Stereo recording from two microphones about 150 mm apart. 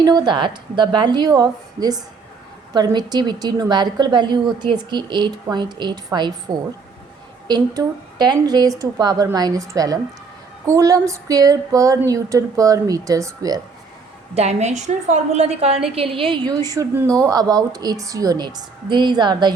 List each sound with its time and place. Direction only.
0.0 s a woman's voice: 25° right (ahead or behind)
14.3 s a woman's voice: 50° right (ahead or behind); by 16.8 s 25° right (ahead or behind)
16.9 s a woman's voice: 15° right (ahead or behind)